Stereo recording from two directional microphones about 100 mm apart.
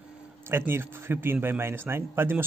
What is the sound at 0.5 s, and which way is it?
Speech, 25° right (ahead or behind).